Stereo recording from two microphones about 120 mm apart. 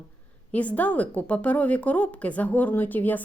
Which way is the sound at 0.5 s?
10° left (ahead or behind).